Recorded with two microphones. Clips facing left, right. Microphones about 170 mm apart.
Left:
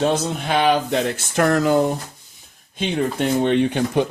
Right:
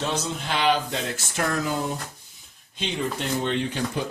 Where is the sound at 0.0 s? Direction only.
55° left (ahead or behind).